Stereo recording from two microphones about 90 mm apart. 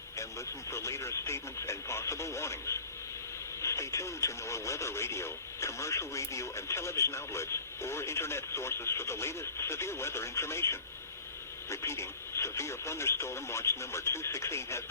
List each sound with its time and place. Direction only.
0.7 s radio: 35° left (ahead or behind)
3.6 s speech: 35° left (ahead or behind)